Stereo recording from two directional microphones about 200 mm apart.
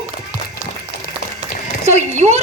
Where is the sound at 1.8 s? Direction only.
35° right (ahead or behind).